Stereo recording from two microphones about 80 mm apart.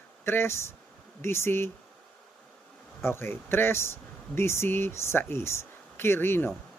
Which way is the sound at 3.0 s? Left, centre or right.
Left.